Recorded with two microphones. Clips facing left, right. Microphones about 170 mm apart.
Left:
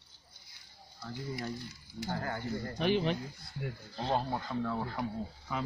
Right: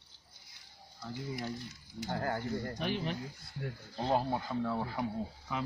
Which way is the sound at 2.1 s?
40° right (ahead or behind).